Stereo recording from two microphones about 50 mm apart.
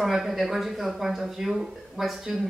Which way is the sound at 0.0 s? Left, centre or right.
Centre.